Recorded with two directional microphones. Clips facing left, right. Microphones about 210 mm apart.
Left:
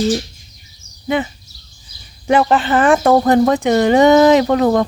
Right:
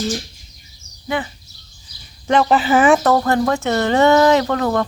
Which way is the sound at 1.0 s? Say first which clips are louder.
Left 5 dB; 20° left (ahead or behind).